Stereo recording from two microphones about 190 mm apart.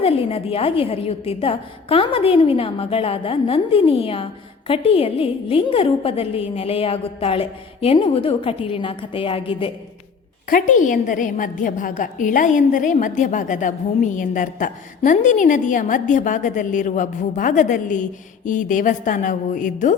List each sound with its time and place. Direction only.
0.0 s a woman's voice: 30° left (ahead or behind)
10.5 s a woman's voice: 45° left (ahead or behind)